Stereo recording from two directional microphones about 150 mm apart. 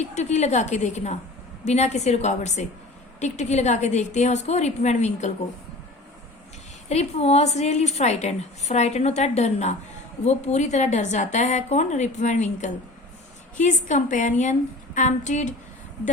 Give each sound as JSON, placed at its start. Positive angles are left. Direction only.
{"t": 0.0, "sound": "a woman's voice", "side_deg": 50}
{"t": 6.8, "sound": "a woman's voice", "side_deg": 45}